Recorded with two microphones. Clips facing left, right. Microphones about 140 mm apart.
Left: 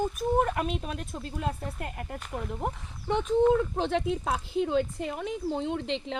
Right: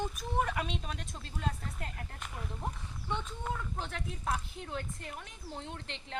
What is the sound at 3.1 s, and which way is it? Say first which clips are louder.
Speech: left 16 dB; 85° left.